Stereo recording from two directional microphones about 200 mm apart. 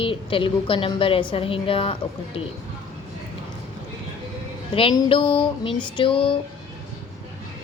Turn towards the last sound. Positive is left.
turn(degrees=25)  # may be behind; listen again after turning